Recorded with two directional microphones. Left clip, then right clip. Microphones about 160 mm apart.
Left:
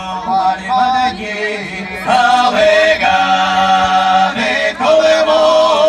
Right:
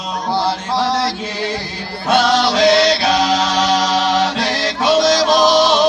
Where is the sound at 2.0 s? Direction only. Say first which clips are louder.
Left 3 dB; 25° left (ahead or behind).